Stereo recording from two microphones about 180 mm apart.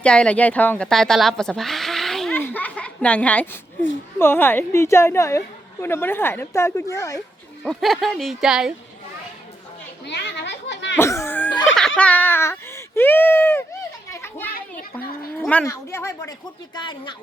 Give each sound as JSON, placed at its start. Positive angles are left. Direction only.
{"t": 0.0, "sound": "speech", "side_deg": 5}
{"t": 7.6, "sound": "speech", "side_deg": 0}
{"t": 10.1, "sound": "children playing", "side_deg": 70}
{"t": 10.9, "sound": "laughter", "side_deg": 15}
{"t": 11.9, "sound": "speech", "side_deg": 10}
{"t": 14.1, "sound": "children playing", "side_deg": 10}
{"t": 15.4, "sound": "speech", "side_deg": 10}
{"t": 16.7, "sound": "speech", "side_deg": 25}